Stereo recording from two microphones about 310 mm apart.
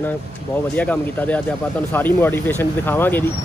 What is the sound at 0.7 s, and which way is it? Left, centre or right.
Speech, centre.